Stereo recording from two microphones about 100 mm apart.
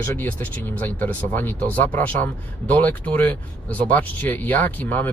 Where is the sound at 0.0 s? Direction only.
20° left (ahead or behind).